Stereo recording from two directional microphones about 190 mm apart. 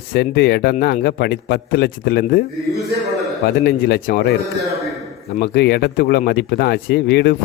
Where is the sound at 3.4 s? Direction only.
60° left (ahead or behind).